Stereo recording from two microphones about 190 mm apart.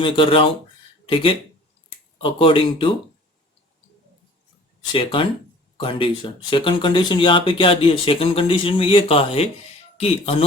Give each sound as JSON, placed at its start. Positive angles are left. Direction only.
{"t": 0.0, "sound": "speech", "side_deg": 25}
{"t": 4.9, "sound": "speech", "side_deg": 25}